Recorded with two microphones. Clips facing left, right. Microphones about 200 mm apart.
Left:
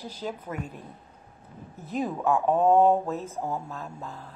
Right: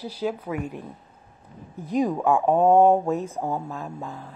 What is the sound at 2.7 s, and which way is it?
Speech, 50° right (ahead or behind).